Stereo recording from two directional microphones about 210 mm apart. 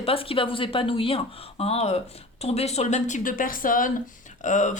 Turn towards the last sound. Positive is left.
turn(degrees=35)  # may be behind; listen again after turning